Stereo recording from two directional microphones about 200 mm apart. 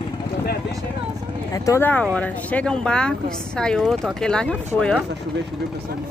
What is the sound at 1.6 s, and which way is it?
Speech, 10° left (ahead or behind).